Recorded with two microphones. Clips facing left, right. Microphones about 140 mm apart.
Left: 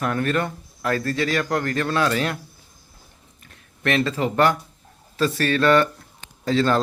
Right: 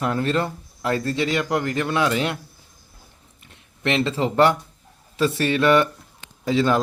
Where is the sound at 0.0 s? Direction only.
25° right (ahead or behind).